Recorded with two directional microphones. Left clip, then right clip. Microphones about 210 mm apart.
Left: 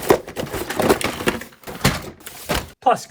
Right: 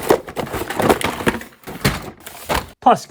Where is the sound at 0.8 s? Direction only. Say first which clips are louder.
Right 2 dB; 10° right (ahead or behind).